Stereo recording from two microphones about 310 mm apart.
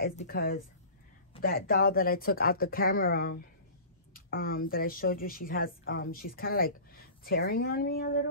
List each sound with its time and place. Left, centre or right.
0.0 s speech: left